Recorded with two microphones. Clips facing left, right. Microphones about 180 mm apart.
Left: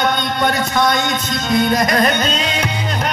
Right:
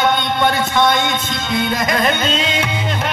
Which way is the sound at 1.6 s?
45° left (ahead or behind).